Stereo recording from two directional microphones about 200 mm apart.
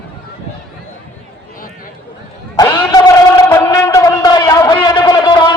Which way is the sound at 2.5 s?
20° left (ahead or behind).